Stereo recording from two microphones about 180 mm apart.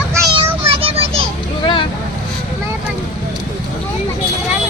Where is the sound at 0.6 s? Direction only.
30° right (ahead or behind).